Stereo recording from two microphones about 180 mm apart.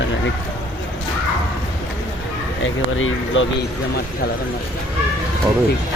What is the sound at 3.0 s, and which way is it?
Speech, 90° left.